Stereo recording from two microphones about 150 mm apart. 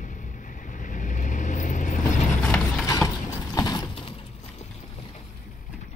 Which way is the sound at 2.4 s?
10° left (ahead or behind).